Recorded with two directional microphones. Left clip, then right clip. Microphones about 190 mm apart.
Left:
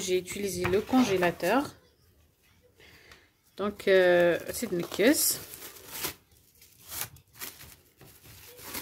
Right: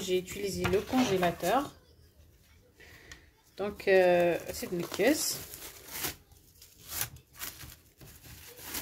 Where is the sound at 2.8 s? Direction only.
15° left (ahead or behind).